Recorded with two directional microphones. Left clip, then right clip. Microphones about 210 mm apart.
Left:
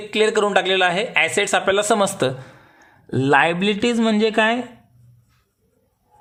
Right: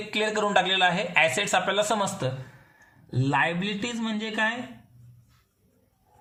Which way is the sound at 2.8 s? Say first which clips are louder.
Left 9 dB; 50° left (ahead or behind).